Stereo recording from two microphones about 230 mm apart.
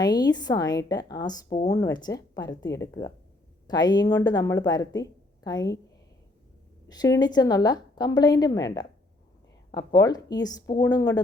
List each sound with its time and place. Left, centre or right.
0.0 s a woman's voice: centre
3.7 s a woman's voice: centre
6.8 s a woman's voice: centre